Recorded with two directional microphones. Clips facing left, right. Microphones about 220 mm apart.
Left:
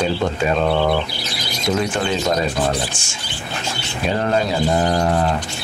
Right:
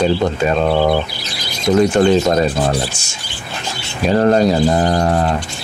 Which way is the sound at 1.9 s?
45° right (ahead or behind).